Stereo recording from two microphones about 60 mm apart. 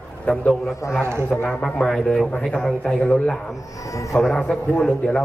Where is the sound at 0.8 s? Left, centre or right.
Left.